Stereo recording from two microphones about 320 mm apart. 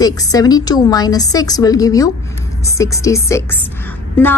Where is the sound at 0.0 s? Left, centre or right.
Centre.